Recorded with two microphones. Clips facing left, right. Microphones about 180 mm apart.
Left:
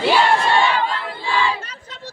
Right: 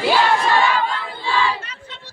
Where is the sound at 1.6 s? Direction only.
40° left (ahead or behind).